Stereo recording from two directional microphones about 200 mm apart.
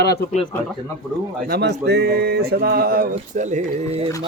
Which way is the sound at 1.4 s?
55° right (ahead or behind).